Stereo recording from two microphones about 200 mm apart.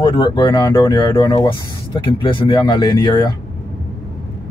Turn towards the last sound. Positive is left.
turn(degrees=20)  # may be behind; listen again after turning